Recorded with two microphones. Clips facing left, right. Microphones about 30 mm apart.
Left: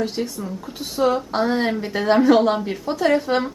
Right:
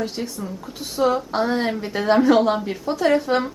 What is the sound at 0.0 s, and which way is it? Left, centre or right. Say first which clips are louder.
Speech: left 2 dB; centre.